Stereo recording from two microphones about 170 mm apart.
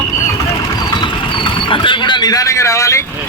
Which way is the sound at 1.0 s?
30° left (ahead or behind).